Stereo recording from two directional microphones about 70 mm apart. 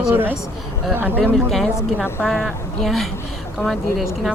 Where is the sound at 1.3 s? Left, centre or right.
Centre.